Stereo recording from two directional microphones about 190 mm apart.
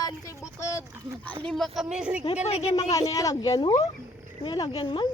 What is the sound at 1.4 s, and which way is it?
Speech, centre (ahead or behind).